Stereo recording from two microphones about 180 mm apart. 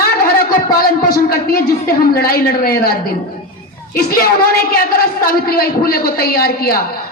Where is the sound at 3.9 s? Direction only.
55° left (ahead or behind).